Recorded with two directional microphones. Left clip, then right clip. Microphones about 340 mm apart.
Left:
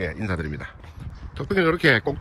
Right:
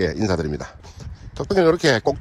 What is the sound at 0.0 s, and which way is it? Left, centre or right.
Speech, right.